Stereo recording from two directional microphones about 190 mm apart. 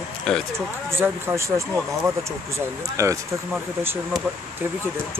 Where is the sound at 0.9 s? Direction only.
15° right (ahead or behind).